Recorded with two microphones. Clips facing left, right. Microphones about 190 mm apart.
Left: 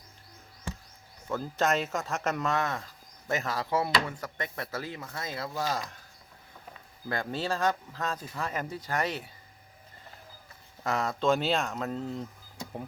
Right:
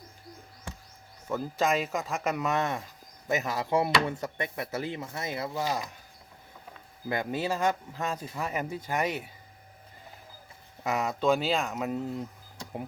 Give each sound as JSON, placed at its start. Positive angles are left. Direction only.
{"t": 1.3, "sound": "speech", "side_deg": -10}
{"t": 2.5, "sound": "speech", "side_deg": -20}
{"t": 7.1, "sound": "speech", "side_deg": -15}
{"t": 10.8, "sound": "speech", "side_deg": -5}